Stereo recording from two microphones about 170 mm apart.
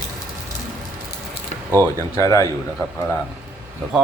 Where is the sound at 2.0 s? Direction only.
20° left (ahead or behind).